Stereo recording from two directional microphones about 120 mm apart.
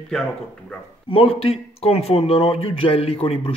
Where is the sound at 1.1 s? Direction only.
50° left (ahead or behind).